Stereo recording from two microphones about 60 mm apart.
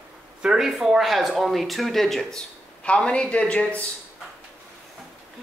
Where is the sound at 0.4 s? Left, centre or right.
Centre.